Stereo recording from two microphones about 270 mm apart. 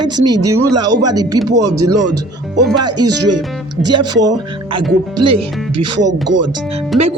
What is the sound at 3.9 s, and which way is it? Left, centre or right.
Speech, centre.